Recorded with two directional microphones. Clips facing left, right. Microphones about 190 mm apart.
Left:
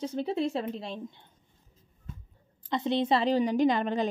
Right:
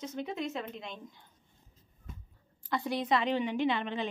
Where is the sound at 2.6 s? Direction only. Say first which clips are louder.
Left 5 dB; 20° left (ahead or behind); by 4.0 s 40° left (ahead or behind).